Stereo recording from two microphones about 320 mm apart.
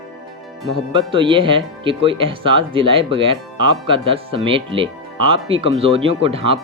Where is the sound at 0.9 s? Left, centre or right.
Centre.